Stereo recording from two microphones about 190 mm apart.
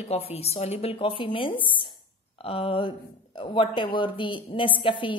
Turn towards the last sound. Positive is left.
turn(degrees=25)  # may be behind; listen again after turning